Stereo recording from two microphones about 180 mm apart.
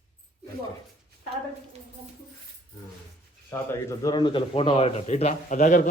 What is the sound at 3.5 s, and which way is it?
A man's voice, 15° left (ahead or behind).